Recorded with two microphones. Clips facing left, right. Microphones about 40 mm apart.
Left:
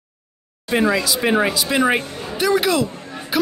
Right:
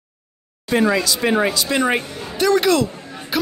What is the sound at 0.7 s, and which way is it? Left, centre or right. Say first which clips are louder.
Speech: right 1 dB; centre.